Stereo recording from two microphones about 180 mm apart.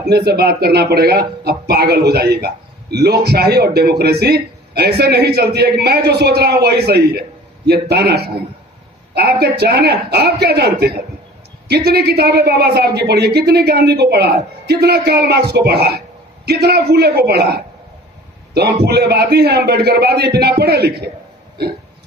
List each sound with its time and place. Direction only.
0.1 s a man's voice: 60° right (ahead or behind)
18.9 s a man's voice: 65° right (ahead or behind)